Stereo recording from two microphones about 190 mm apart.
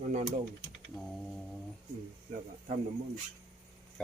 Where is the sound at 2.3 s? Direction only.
35° right (ahead or behind).